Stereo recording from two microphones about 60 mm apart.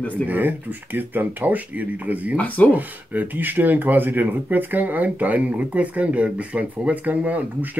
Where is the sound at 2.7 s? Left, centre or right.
Right.